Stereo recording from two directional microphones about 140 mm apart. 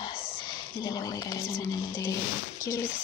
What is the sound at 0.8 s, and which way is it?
Speech, 25° left (ahead or behind).